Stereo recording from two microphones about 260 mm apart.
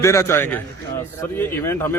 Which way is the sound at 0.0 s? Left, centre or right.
Centre.